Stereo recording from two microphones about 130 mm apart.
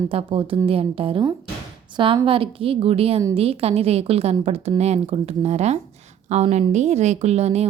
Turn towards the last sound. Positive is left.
turn(degrees=-55)  # may be behind; listen again after turning